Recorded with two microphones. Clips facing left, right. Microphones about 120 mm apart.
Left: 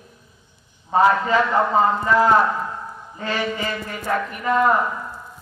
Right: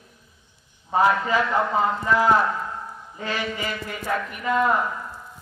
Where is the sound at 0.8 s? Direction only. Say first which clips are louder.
Left 3 dB; 5° right (ahead or behind).